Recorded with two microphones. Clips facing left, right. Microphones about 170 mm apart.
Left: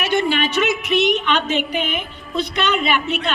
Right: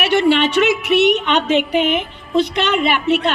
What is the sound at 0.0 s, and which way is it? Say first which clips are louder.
A woman's voice: right 5 dB; 75° right (ahead or behind).